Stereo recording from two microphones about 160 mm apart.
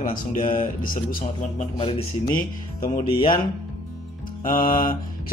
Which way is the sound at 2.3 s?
60° left (ahead or behind).